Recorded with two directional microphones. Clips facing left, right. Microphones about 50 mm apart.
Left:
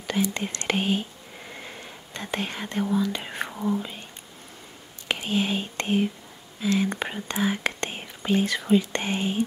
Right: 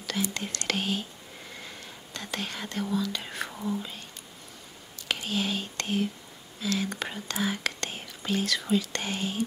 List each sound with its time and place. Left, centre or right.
0.0 s speech: left
5.0 s speech: left